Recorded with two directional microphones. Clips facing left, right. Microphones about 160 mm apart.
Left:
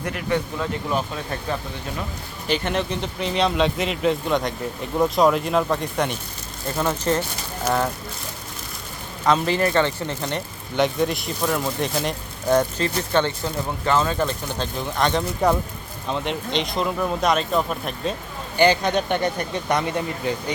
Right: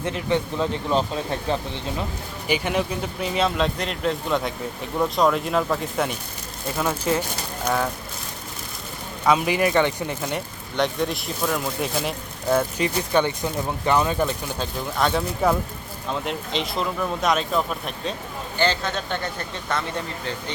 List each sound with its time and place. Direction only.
0.0 s speech: 25° right (ahead or behind)
2.5 s speech: 10° right (ahead or behind)
9.2 s speech: 10° right (ahead or behind)
10.8 s speech: centre (ahead or behind)
18.5 s speech: 15° left (ahead or behind)